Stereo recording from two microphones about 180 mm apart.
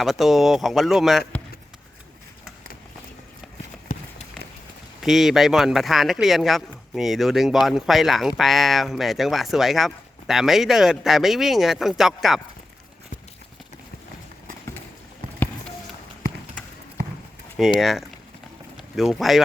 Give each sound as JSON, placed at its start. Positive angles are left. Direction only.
{"t": 0.0, "sound": "speech", "side_deg": 0}
{"t": 3.9, "sound": "run", "side_deg": 45}
{"t": 5.0, "sound": "speech", "side_deg": 0}
{"t": 17.7, "sound": "speech", "side_deg": 0}